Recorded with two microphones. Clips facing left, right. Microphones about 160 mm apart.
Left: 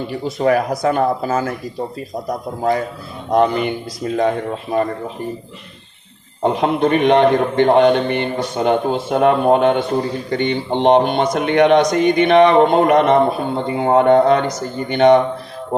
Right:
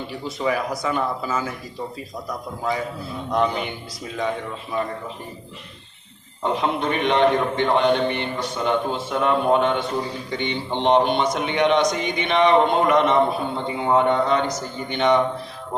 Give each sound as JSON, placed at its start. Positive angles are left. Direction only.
{"t": 0.1, "sound": "a man's voice", "side_deg": 55}
{"t": 3.7, "sound": "speech", "side_deg": 55}
{"t": 6.4, "sound": "a man's voice", "side_deg": 55}